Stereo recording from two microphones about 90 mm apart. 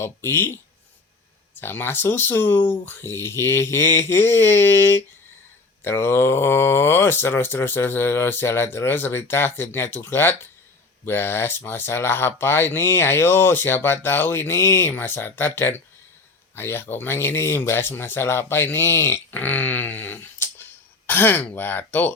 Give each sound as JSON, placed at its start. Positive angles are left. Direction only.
{"t": 0.0, "sound": "speech", "side_deg": 25}